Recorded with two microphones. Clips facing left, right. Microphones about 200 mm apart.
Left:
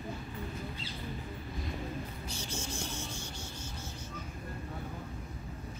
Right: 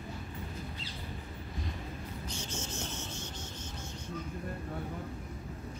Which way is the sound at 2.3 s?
10° left (ahead or behind).